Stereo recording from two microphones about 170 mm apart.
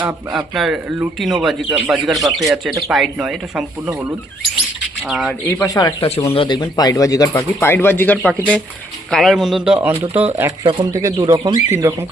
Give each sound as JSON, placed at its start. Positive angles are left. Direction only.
{"t": 0.0, "sound": "speech", "side_deg": -10}
{"t": 2.5, "sound": "speech", "side_deg": -20}
{"t": 2.9, "sound": "speech", "side_deg": 0}
{"t": 5.0, "sound": "speech", "side_deg": 0}
{"t": 5.5, "sound": "speech", "side_deg": 10}
{"t": 6.0, "sound": "speech", "side_deg": 35}
{"t": 10.6, "sound": "speech", "side_deg": -25}